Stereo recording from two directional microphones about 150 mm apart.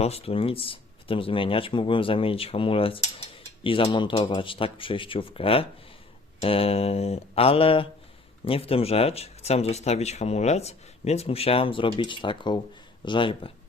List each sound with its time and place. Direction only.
0.0 s speech: 40° left (ahead or behind)